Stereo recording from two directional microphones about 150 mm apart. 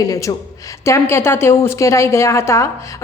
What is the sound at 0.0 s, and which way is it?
A woman's voice, 20° left (ahead or behind).